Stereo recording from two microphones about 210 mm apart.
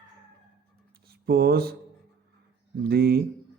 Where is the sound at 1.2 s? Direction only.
45° right (ahead or behind).